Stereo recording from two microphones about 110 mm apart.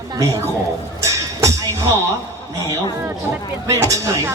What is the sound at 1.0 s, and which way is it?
Music, 30° right (ahead or behind).